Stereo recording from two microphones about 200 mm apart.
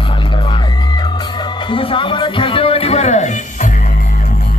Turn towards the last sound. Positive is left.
turn(degrees=35)  # may be behind; listen again after turning